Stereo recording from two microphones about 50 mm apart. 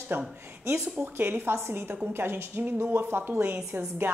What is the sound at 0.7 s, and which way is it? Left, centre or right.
Speech, right.